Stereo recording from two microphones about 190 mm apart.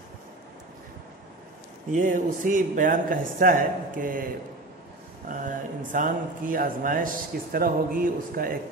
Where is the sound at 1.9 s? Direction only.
45° right (ahead or behind).